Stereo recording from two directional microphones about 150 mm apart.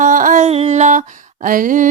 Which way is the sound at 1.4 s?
60° right (ahead or behind).